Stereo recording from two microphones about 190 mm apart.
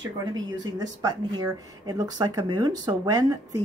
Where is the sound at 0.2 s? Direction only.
20° right (ahead or behind).